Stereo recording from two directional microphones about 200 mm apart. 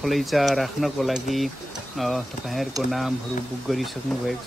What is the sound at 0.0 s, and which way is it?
Speech, centre (ahead or behind).